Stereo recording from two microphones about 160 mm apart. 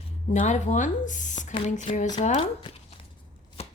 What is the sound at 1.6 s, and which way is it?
Speech, 50° left (ahead or behind).